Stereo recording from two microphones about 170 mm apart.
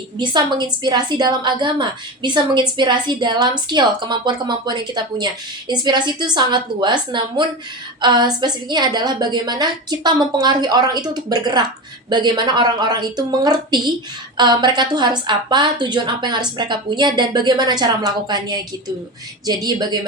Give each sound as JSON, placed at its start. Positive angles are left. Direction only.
{"t": 0.2, "sound": "a woman's voice", "side_deg": -25}